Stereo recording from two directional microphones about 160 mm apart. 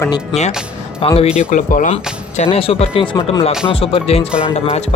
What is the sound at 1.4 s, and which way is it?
Speech, 55° left (ahead or behind).